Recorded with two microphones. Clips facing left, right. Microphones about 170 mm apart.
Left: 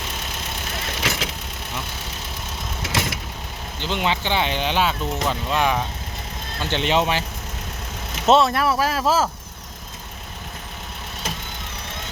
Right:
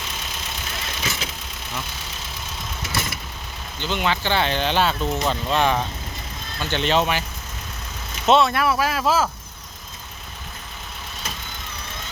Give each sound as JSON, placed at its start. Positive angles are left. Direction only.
{"t": 0.0, "sound": "vehicle", "side_deg": 55}
{"t": 2.8, "sound": "vehicle", "side_deg": 90}
{"t": 3.8, "sound": "speech", "side_deg": 25}
{"t": 6.6, "sound": "speech", "side_deg": 25}
{"t": 8.4, "sound": "speech", "side_deg": 35}